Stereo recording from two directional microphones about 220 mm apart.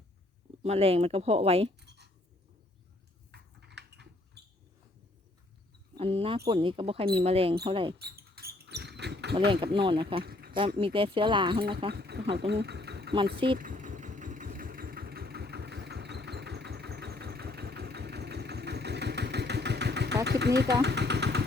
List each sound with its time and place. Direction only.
0.6 s speech: 30° right (ahead or behind)
1.8 s writing: 50° right (ahead or behind)
3.3 s a sound: 50° right (ahead or behind)
6.0 s speech: 25° right (ahead or behind)
7.9 s rodents: 45° right (ahead or behind)
9.7 s speech: 25° right (ahead or behind)
10.2 s a sound: 45° right (ahead or behind)
10.8 s speech: 25° right (ahead or behind)
11.9 s speech: 45° right (ahead or behind)
13.6 s engine: 35° right (ahead or behind)
20.2 s speech: 50° right (ahead or behind)
20.8 s vehicle: 50° right (ahead or behind)